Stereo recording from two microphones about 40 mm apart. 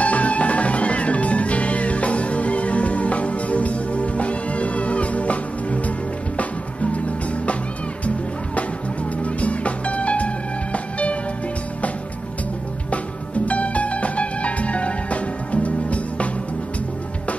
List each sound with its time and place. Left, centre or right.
0.0 s music: left
9.2 s music: left
12.9 s music: left